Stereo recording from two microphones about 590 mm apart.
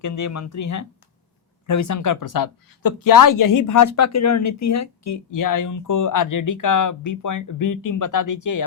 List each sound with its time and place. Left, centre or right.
0.0 s speech: left